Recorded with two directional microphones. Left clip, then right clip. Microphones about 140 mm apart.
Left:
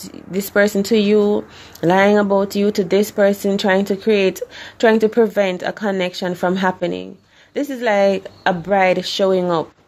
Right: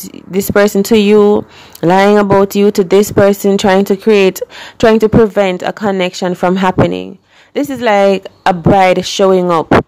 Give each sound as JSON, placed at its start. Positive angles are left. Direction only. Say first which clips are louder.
{"t": 0.3, "sound": "speech", "louder": "right 6 dB", "side_deg": -35}